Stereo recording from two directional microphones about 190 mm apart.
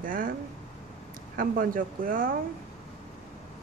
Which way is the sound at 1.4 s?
45° right (ahead or behind).